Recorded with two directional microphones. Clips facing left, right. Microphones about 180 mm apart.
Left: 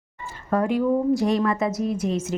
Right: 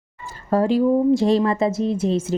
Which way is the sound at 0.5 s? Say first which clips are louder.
Right 4 dB; 30° right (ahead or behind).